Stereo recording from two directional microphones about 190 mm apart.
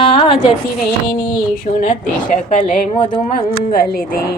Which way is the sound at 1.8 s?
45° left (ahead or behind).